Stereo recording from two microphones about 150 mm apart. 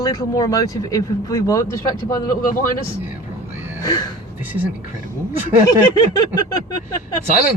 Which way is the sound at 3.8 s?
25° left (ahead or behind).